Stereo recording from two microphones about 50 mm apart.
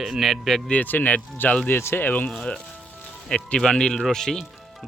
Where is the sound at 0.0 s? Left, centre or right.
Centre.